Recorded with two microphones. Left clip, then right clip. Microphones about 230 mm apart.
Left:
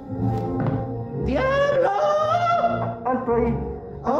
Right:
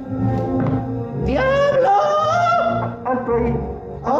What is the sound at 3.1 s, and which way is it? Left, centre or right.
Music, centre.